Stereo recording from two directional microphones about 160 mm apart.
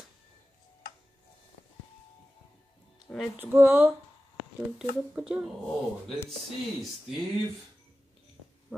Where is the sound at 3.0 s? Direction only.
Centre (ahead or behind).